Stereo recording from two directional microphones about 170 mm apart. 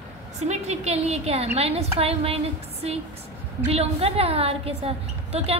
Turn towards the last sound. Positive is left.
turn(degrees=-35)  # may be behind; listen again after turning